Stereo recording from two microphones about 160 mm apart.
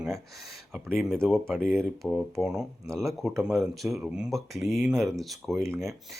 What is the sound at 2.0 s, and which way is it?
Speech, centre (ahead or behind).